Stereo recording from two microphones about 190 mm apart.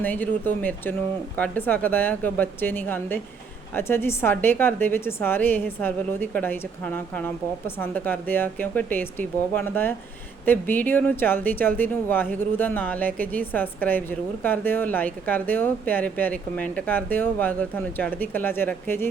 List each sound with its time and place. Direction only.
0.0 s speech: 10° left (ahead or behind)